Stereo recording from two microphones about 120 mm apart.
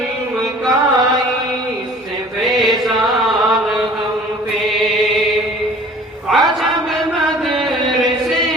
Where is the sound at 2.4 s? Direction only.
Centre (ahead or behind).